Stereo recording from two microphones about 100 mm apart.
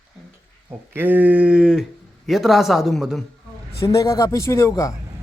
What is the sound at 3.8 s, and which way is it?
A man's voice, 30° left (ahead or behind).